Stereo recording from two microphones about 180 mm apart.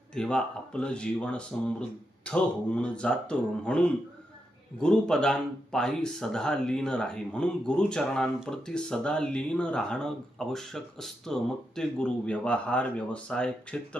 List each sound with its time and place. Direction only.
0.1 s speech: 5° left (ahead or behind)